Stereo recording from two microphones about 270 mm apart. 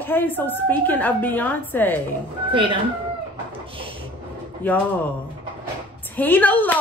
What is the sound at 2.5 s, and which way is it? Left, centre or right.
Speech, centre.